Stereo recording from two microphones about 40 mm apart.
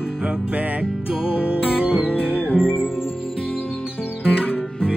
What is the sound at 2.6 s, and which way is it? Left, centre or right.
Music, centre.